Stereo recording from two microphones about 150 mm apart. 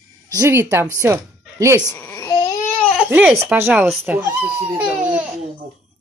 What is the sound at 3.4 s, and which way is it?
Speech, 15° right (ahead or behind).